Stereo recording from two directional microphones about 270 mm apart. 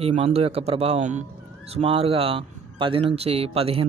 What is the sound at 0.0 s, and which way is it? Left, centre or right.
Speech, right.